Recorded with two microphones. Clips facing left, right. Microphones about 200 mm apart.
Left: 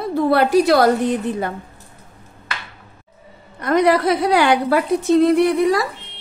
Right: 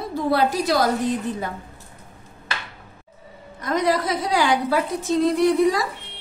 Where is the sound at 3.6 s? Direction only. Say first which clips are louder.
Left 6 dB; 65° left (ahead or behind).